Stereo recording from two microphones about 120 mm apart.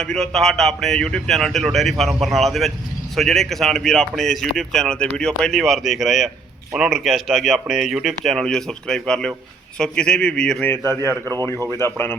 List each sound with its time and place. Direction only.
0.0 s a man's voice: 5° left (ahead or behind)
11.8 s speech: 20° left (ahead or behind)